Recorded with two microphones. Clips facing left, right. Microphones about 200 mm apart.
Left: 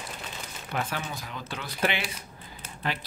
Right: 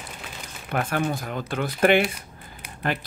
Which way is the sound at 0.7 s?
55° right (ahead or behind).